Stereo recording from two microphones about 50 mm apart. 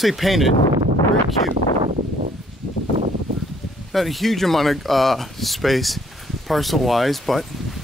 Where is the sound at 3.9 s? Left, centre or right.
Centre.